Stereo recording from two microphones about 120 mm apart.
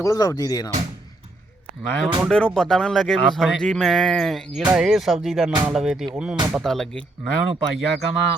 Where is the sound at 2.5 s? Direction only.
5° left (ahead or behind).